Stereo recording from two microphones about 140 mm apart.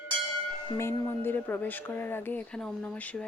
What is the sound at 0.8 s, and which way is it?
A woman's voice, 20° left (ahead or behind).